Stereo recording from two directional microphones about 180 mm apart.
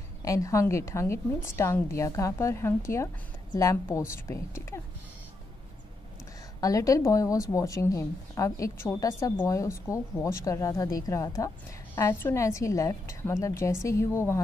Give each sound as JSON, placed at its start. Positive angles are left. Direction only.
{"t": 0.2, "sound": "speech", "side_deg": 20}
{"t": 6.6, "sound": "speech", "side_deg": 20}